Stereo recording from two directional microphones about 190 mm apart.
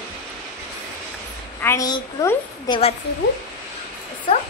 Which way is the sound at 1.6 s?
20° left (ahead or behind).